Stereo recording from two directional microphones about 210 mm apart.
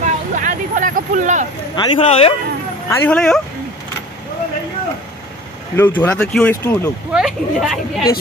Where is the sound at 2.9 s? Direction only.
5° left (ahead or behind).